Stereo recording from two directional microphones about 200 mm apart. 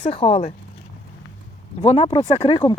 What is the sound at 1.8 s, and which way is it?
Speech, 30° left (ahead or behind).